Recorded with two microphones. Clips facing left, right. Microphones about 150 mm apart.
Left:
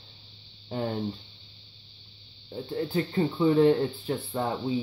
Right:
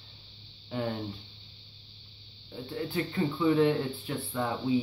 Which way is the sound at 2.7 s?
35° left (ahead or behind).